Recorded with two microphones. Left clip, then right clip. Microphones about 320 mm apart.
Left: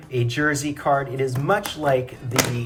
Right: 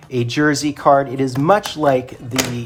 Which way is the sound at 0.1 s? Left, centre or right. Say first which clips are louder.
Right 5 dB; centre.